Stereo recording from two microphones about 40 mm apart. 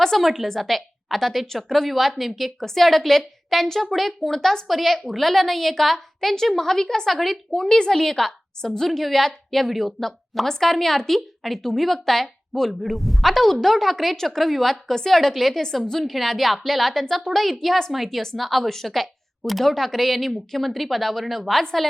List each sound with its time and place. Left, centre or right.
0.0 s a woman's voice: centre
4.4 s a woman's voice: centre
4.7 s a woman's voice: centre
7.5 s a woman's voice: centre